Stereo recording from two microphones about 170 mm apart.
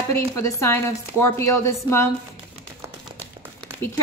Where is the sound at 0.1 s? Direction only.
15° left (ahead or behind).